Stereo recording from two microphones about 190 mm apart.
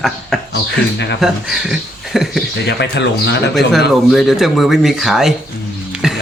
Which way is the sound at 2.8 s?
65° left (ahead or behind).